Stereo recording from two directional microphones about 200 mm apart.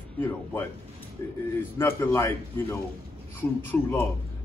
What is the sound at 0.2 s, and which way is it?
Speech, 10° left (ahead or behind).